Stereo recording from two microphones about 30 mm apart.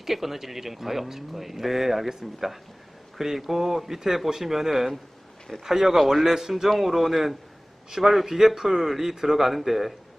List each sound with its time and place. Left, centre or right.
0.0 s speech: centre
6.7 s speech: centre